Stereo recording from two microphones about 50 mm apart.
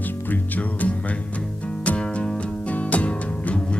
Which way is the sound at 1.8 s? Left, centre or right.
Left.